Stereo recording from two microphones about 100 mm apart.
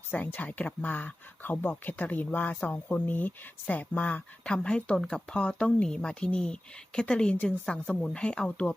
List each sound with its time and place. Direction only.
0.1 s speech: 15° left (ahead or behind)